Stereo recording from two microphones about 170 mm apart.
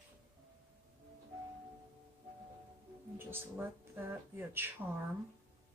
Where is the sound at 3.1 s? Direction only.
10° right (ahead or behind).